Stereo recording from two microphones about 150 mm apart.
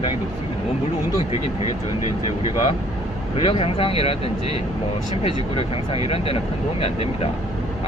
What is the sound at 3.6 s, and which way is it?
Speech, 40° left (ahead or behind).